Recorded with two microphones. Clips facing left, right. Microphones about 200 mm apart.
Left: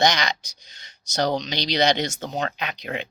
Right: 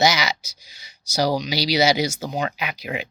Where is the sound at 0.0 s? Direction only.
5° right (ahead or behind).